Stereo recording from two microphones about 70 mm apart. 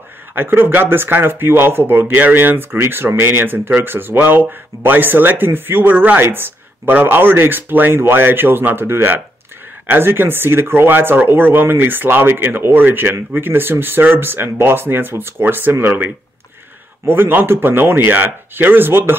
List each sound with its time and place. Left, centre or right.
0.3 s speech: right
17.1 s speech: right